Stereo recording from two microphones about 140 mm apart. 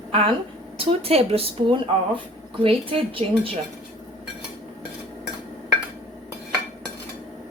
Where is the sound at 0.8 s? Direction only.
45° right (ahead or behind).